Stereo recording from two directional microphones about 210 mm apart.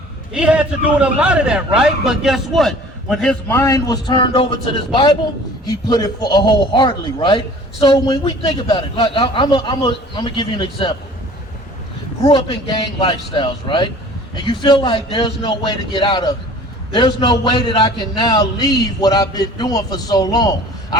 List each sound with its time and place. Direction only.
0.3 s a man's voice: 5° right (ahead or behind); by 10.9 s 25° left (ahead or behind)
12.2 s a man's voice: 25° left (ahead or behind)